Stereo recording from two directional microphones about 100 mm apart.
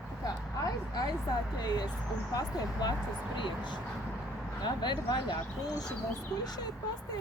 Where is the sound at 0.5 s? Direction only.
40° left (ahead or behind).